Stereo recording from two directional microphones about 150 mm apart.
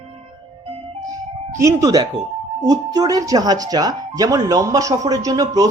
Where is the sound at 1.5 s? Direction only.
20° right (ahead or behind).